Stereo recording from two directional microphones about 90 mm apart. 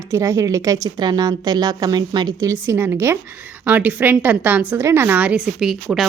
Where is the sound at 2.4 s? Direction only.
35° right (ahead or behind); by 4.7 s 15° right (ahead or behind).